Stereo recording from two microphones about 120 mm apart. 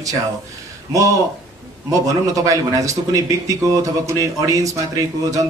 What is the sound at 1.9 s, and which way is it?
Speech, 30° right (ahead or behind).